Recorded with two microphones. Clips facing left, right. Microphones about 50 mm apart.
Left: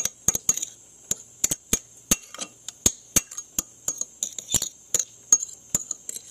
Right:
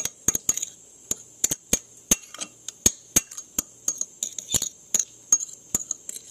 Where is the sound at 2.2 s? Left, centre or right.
Centre.